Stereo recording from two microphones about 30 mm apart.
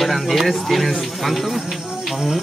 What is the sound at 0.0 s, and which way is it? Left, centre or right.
Speech, centre.